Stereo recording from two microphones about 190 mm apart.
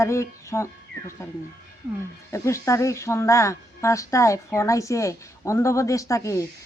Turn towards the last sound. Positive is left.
turn(degrees=15)  # may be behind; listen again after turning